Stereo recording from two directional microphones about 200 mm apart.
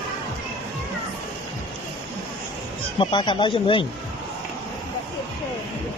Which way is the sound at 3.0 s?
25° left (ahead or behind).